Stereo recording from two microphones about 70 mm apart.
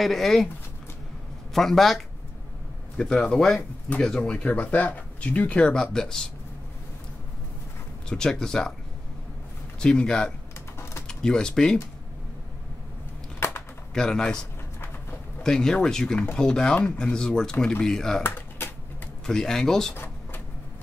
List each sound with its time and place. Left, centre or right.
0.0 s speech: centre
1.5 s speech: centre
3.0 s speech: centre
8.1 s speech: centre
9.8 s speech: centre
13.4 s a sound: left
13.9 s speech: centre
15.4 s speech: centre
18.2 s a sound: left
19.2 s speech: centre